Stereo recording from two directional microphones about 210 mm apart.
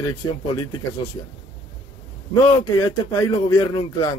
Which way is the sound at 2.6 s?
15° left (ahead or behind).